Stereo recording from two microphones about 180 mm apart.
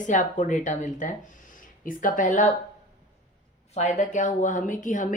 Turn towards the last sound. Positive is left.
turn(degrees=45)  # may be behind; listen again after turning